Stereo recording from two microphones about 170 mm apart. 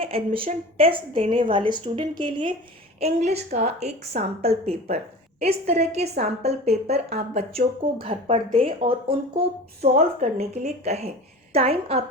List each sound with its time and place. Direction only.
0.0 s a woman's voice: 35° right (ahead or behind)
3.0 s a woman's voice: 40° right (ahead or behind)